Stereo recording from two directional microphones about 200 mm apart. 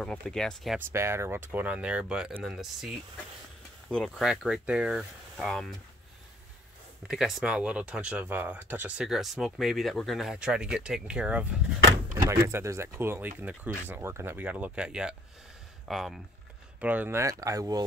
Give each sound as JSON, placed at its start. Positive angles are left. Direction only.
{"t": 0.0, "sound": "speech", "side_deg": 5}
{"t": 0.7, "sound": "speech", "side_deg": -10}
{"t": 3.9, "sound": "speech", "side_deg": 0}
{"t": 7.1, "sound": "speech", "side_deg": 0}